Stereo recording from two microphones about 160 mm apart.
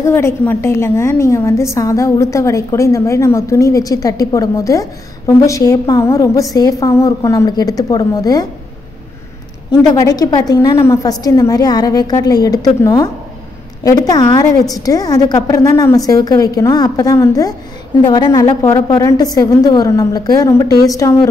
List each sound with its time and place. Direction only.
0.0 s a woman's voice: 15° left (ahead or behind)
9.7 s a woman's voice: 25° left (ahead or behind)